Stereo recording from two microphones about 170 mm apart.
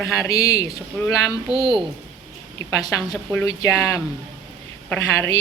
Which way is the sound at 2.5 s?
20° left (ahead or behind).